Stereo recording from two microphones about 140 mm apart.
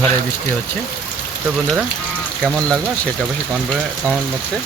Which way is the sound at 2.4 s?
5° left (ahead or behind).